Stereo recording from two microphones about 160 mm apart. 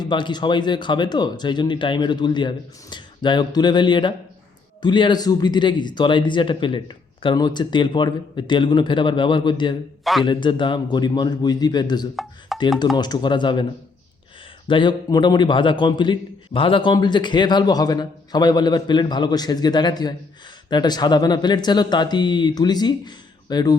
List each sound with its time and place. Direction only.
0.0 s a man's voice: 30° left (ahead or behind)
10.0 s a man's voice: centre (ahead or behind)
10.2 s a man's voice: 30° left (ahead or behind)
12.1 s speech: centre (ahead or behind)
13.0 s a man's voice: 25° left (ahead or behind)
14.7 s a man's voice: 30° left (ahead or behind)